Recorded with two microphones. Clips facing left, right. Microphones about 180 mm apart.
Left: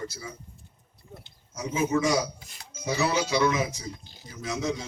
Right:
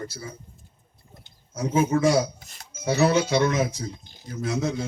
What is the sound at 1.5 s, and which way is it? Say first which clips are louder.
A man's voice: right 4 dB; 55° right (ahead or behind).